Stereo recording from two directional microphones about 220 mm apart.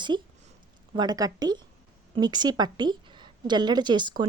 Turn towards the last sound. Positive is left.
turn(degrees=-20)  # may be behind; listen again after turning